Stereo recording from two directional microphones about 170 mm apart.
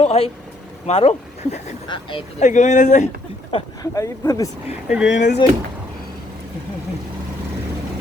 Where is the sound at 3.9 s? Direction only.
20° left (ahead or behind).